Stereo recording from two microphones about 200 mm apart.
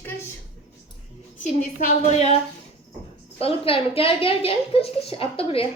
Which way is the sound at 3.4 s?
30° left (ahead or behind).